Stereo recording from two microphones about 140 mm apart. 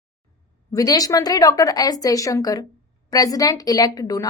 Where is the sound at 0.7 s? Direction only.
25° left (ahead or behind).